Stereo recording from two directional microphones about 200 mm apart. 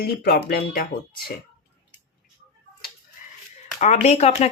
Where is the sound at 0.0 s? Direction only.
50° left (ahead or behind).